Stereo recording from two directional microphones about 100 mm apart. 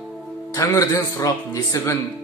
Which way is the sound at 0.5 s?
30° left (ahead or behind).